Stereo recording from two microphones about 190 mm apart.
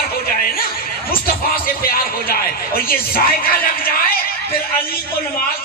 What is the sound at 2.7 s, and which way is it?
Speech, 50° left (ahead or behind).